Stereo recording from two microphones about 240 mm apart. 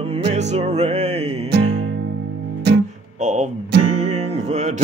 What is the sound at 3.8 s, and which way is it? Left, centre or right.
Music, right.